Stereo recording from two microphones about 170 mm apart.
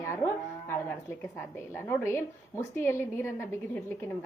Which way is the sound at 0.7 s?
10° left (ahead or behind).